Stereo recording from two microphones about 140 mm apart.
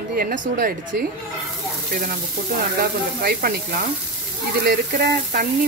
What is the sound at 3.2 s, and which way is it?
Frying, 90° right.